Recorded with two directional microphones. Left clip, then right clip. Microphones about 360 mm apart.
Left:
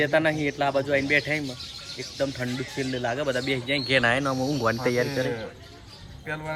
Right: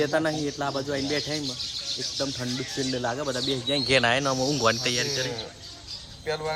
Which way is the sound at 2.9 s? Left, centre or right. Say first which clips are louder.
Left 3 dB; centre.